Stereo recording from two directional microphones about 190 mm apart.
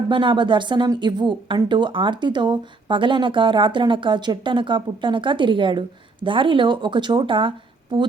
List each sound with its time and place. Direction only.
0.1 s speech: 25° right (ahead or behind)